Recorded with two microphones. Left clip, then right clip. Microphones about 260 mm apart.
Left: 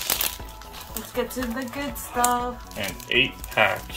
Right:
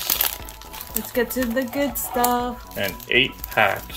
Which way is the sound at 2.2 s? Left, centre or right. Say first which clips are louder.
Right 2 dB; right.